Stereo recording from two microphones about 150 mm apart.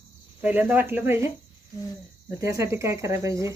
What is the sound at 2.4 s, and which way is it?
Speech, 20° right (ahead or behind).